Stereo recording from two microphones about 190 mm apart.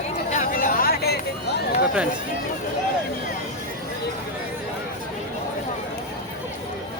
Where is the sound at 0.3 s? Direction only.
45° left (ahead or behind).